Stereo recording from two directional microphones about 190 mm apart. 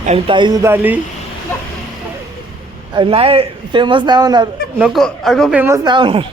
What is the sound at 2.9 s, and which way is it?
Speech, 25° right (ahead or behind).